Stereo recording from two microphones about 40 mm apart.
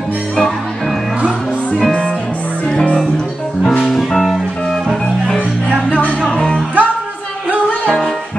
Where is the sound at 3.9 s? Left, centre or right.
Centre.